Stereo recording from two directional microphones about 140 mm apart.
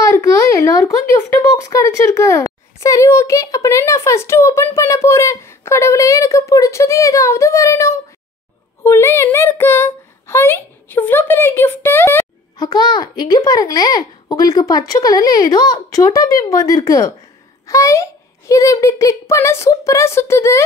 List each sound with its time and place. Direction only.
0.0 s a child's voice: 20° left (ahead or behind)
12.5 s a child's voice: 30° left (ahead or behind)